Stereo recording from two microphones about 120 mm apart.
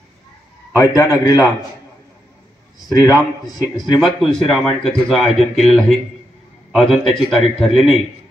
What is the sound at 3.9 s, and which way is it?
A man's voice, centre (ahead or behind).